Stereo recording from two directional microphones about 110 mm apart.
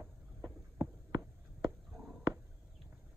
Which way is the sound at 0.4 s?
30° right (ahead or behind).